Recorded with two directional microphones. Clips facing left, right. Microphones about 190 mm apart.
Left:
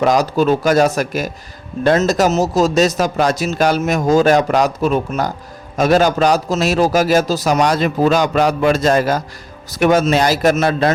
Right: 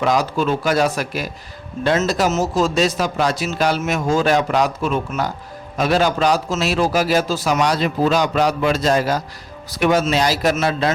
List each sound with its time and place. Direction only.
0.0 s speech: 45° left (ahead or behind)